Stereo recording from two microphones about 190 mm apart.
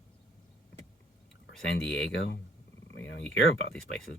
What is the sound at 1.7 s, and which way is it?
Speech, 70° left (ahead or behind).